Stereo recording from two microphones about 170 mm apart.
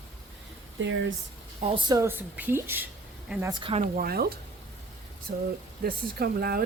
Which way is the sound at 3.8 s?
55° right (ahead or behind).